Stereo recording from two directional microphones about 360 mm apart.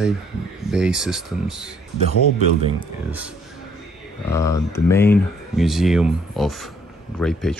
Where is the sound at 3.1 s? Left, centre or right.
Centre.